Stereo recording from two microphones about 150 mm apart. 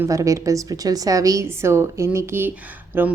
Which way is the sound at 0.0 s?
20° right (ahead or behind).